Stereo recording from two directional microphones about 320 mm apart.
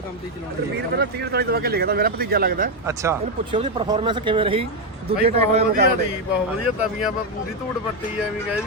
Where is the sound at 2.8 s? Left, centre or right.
Centre.